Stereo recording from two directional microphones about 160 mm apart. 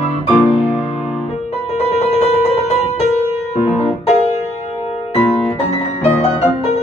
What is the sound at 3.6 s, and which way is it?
Music, 40° left (ahead or behind).